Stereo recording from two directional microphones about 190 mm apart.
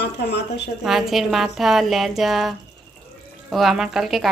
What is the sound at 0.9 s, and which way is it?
A woman's voice, centre (ahead or behind).